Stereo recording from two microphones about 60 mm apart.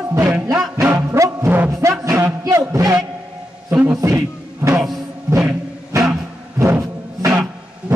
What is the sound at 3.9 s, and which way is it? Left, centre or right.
Music, right.